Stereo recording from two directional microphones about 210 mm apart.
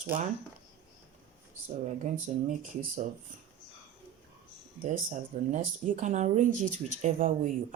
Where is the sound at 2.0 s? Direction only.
35° right (ahead or behind).